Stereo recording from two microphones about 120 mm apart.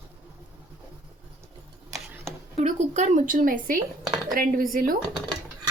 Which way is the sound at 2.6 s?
75° right (ahead or behind).